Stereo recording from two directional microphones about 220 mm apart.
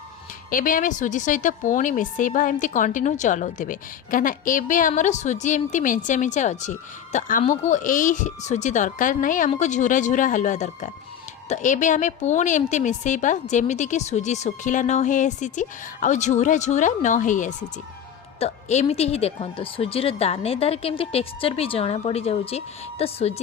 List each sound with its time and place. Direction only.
0.5 s a woman's voice: 40° left (ahead or behind)